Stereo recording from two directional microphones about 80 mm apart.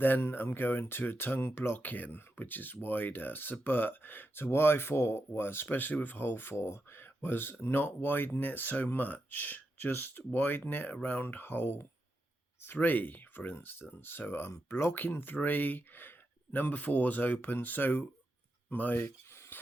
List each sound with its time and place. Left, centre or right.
0.0 s speech: left
14.9 s speech: left
19.3 s dishes: left